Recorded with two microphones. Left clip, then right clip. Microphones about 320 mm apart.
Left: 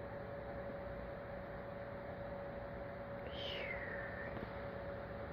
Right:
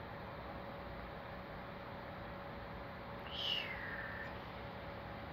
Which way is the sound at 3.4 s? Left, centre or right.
Centre.